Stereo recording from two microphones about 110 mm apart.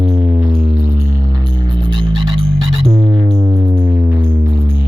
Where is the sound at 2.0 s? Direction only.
50° right (ahead or behind).